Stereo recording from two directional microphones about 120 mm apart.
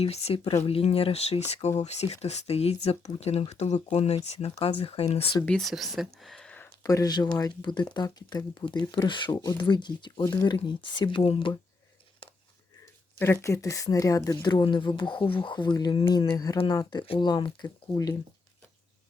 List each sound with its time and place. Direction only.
0.0 s speech: 60° left (ahead or behind)
5.5 s speech: centre (ahead or behind)
6.1 s a sound: 5° left (ahead or behind)
6.8 s speech: 30° left (ahead or behind); by 11.5 s 45° left (ahead or behind)
13.1 s speech: 20° left (ahead or behind); by 17.7 s 40° left (ahead or behind)
17.9 s speech: 25° left (ahead or behind)